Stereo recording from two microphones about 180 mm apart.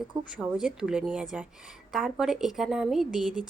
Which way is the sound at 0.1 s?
5° right (ahead or behind).